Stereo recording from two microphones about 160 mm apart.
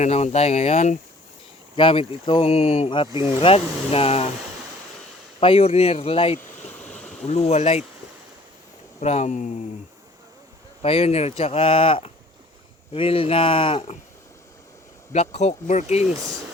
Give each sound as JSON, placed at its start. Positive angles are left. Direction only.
{"t": 0.0, "sound": "speech", "side_deg": 40}
{"t": 1.7, "sound": "speech", "side_deg": 35}
{"t": 5.4, "sound": "speech", "side_deg": 35}
{"t": 6.7, "sound": "stream", "side_deg": 5}
{"t": 7.3, "sound": "speech", "side_deg": 40}
{"t": 9.0, "sound": "speech", "side_deg": 45}
{"t": 10.8, "sound": "speech", "side_deg": 40}
{"t": 15.1, "sound": "speech", "side_deg": 45}